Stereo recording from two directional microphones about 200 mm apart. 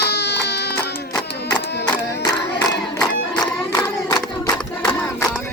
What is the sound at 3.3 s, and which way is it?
Hands, 20° left (ahead or behind).